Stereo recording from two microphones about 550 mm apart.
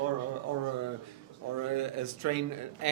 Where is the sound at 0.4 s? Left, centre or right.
Right.